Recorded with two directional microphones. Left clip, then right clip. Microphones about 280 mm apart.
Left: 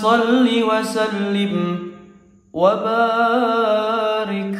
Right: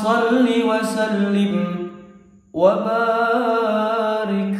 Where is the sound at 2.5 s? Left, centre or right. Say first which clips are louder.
Even; centre.